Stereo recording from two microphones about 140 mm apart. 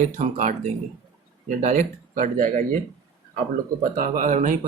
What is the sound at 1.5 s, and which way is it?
Speech, 65° right (ahead or behind).